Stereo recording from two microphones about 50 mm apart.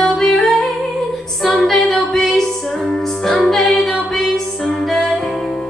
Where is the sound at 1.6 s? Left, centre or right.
Centre.